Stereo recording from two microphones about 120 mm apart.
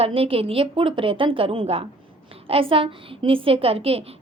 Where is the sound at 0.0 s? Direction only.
50° right (ahead or behind).